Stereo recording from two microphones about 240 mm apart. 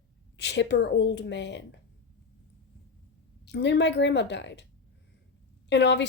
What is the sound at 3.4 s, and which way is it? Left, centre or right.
Speech, left.